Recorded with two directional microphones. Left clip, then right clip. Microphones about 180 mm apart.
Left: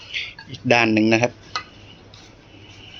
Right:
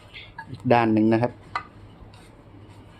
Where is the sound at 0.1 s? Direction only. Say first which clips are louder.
Left 11 dB; 10° right (ahead or behind).